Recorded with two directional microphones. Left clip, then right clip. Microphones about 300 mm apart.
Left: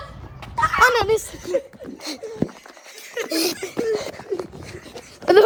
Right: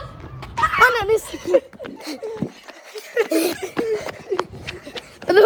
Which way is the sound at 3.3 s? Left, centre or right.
Centre.